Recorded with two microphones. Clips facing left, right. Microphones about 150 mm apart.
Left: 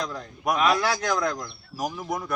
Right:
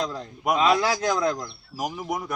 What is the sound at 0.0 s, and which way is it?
A man's voice, 25° right (ahead or behind).